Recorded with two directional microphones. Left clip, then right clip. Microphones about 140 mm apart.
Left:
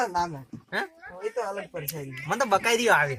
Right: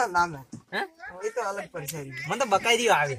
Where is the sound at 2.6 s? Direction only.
10° right (ahead or behind).